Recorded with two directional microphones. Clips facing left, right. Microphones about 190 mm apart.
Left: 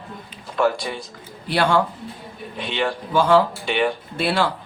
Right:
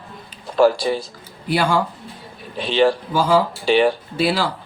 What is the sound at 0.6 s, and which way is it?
Speech, 35° right (ahead or behind).